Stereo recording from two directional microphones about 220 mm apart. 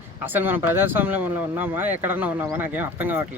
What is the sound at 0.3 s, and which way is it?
Speech, 10° right (ahead or behind).